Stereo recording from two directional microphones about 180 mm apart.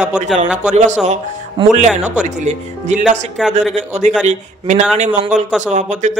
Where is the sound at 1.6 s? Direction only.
30° right (ahead or behind).